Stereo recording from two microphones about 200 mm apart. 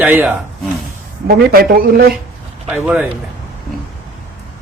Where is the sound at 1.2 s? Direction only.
50° right (ahead or behind).